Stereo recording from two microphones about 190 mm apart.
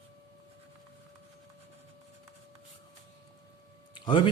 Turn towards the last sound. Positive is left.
turn(degrees=25)  # may be behind; listen again after turning